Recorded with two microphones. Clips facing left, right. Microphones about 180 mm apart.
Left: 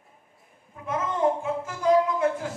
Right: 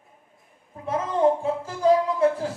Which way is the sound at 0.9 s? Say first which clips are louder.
Right 3 dB; 30° right (ahead or behind).